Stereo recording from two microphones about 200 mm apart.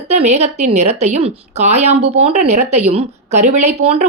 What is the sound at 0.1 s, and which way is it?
A woman's voice, 35° right (ahead or behind).